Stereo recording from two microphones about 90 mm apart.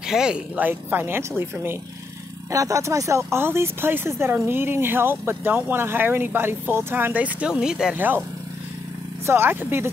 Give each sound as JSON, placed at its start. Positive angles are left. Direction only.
{"t": 0.1, "sound": "speech", "side_deg": -5}
{"t": 0.6, "sound": "speech", "side_deg": -20}
{"t": 2.5, "sound": "speech", "side_deg": -35}
{"t": 9.2, "sound": "speech", "side_deg": -25}